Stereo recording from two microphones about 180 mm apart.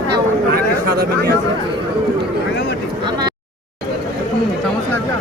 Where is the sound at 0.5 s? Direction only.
60° right (ahead or behind).